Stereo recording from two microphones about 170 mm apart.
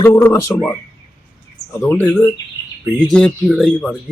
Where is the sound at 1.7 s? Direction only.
10° left (ahead or behind).